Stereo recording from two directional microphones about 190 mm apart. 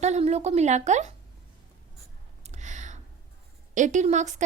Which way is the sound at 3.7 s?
40° right (ahead or behind).